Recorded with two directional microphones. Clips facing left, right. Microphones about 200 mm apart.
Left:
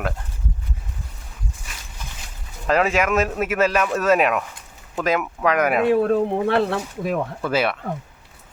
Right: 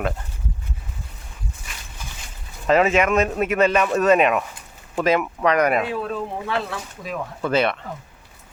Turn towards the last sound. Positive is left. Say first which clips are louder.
# right 1 dB
turn(degrees=5)  # may be behind; listen again after turning